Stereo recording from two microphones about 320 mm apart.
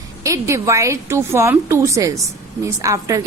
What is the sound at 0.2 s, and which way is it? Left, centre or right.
A woman's voice, centre.